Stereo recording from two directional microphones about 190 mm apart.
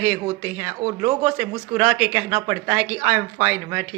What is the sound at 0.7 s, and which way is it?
Speech, 30° right (ahead or behind).